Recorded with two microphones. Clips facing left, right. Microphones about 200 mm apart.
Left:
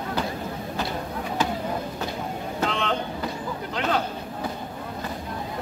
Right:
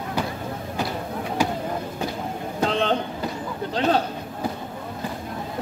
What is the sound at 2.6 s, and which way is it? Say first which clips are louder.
Vehicle: right 4 dB; 35° right (ahead or behind).